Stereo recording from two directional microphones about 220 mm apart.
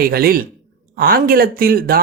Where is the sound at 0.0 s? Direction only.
45° right (ahead or behind).